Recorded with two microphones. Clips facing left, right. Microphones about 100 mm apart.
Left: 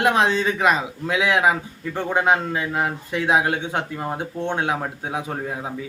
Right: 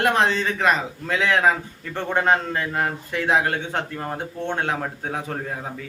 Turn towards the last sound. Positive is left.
turn(degrees=15)  # may be behind; listen again after turning